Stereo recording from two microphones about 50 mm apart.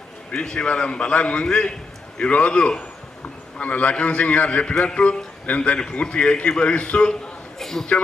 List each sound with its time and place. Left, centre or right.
0.3 s a man's voice: centre
7.6 s a woman's voice: centre